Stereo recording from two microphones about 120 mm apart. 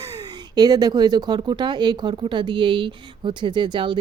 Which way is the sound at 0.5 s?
35° right (ahead or behind).